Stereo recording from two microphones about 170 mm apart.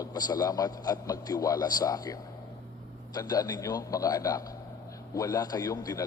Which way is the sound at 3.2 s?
20° left (ahead or behind).